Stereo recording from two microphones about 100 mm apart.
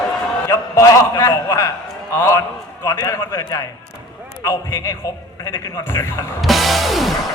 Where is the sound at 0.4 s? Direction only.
30° left (ahead or behind).